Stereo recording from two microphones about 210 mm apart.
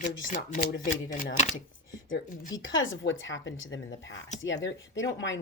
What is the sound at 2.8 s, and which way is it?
A woman's voice, 65° left (ahead or behind).